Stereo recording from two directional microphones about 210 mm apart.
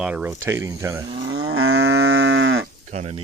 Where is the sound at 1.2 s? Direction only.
55° right (ahead or behind).